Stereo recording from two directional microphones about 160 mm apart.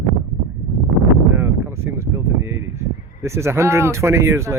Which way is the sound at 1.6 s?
15° right (ahead or behind).